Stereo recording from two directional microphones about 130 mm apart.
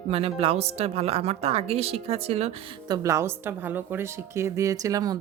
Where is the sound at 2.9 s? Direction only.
25° right (ahead or behind).